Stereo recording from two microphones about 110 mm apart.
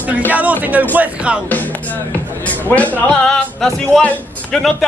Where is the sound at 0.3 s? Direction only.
15° right (ahead or behind).